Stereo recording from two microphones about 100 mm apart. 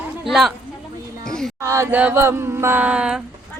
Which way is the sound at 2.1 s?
25° right (ahead or behind).